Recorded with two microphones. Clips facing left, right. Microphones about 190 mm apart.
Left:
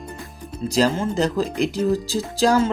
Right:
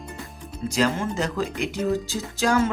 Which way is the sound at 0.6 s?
35° left (ahead or behind).